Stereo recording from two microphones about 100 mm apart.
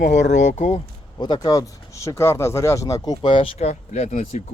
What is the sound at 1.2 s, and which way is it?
Speech, 45° left (ahead or behind).